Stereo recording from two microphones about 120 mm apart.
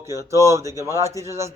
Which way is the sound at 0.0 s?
25° right (ahead or behind).